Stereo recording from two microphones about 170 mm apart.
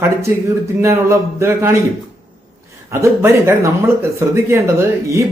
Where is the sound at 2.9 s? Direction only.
15° right (ahead or behind).